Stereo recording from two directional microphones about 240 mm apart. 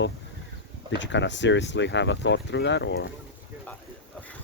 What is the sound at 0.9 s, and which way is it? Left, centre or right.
Speech, left.